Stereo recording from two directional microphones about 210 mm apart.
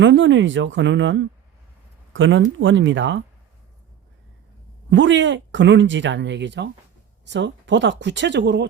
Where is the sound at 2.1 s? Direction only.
65° right (ahead or behind).